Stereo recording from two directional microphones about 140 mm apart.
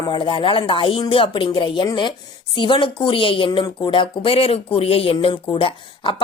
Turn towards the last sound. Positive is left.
turn(degrees=40)  # may be behind; listen again after turning